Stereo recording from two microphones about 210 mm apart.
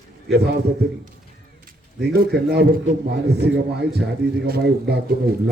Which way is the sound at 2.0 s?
50° right (ahead or behind).